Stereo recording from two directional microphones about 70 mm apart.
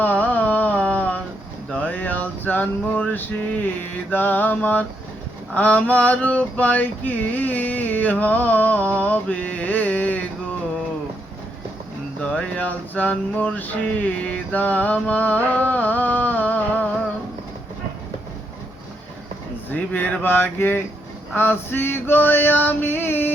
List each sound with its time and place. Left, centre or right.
0.0 s carnatic music: left
1.8 s male singing: left
9.0 s mantra: left
12.2 s male singing: centre
19.7 s male singing: left